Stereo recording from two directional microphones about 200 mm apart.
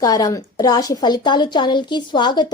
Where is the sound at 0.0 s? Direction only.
20° left (ahead or behind).